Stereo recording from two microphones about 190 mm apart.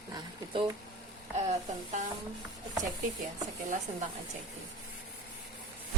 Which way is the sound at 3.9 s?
30° right (ahead or behind).